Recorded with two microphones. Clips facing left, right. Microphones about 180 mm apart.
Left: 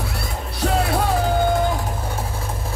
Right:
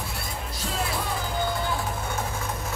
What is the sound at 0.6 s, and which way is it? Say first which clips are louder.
Music: left 10 dB; 65° left (ahead or behind).